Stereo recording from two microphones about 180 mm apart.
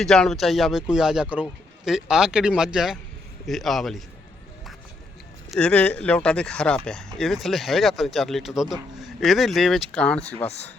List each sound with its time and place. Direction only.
0.0 s speech: centre (ahead or behind)
5.5 s speech: 5° left (ahead or behind)
10.4 s speech: 35° left (ahead or behind)